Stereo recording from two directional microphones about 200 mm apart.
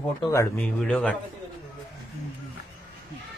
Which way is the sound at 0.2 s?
15° left (ahead or behind).